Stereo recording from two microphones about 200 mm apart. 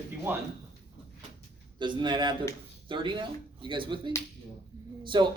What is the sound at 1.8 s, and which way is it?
A man's voice, 25° right (ahead or behind).